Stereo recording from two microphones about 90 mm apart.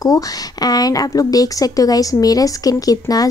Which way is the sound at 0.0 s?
45° left (ahead or behind).